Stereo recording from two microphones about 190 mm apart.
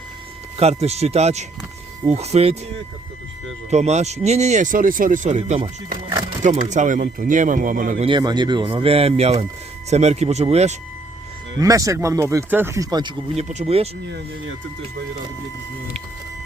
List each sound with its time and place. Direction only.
0.5 s speech: 35° right (ahead or behind)
3.7 s speech: 35° right (ahead or behind)
8.0 s speech: 25° right (ahead or behind)
11.6 s speech: 15° right (ahead or behind); by 13.8 s 35° right (ahead or behind)